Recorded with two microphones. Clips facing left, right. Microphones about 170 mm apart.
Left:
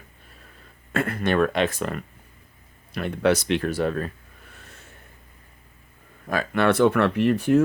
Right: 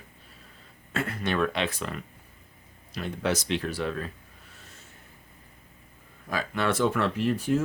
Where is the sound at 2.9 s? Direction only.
60° left (ahead or behind).